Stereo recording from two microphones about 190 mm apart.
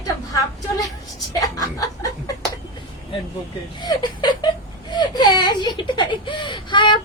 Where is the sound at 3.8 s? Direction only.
25° left (ahead or behind).